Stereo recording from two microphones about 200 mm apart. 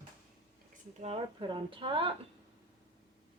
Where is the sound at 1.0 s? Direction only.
30° right (ahead or behind).